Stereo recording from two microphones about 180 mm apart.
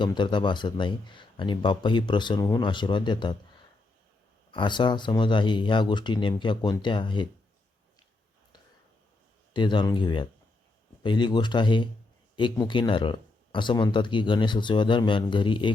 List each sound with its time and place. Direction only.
0.0 s speech: 25° left (ahead or behind)
4.5 s speech: 25° left (ahead or behind)
9.5 s speech: 25° left (ahead or behind)